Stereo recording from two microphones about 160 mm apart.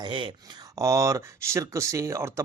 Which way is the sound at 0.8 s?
20° right (ahead or behind).